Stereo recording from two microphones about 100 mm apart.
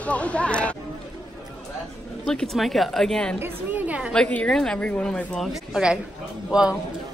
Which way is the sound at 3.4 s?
15° right (ahead or behind).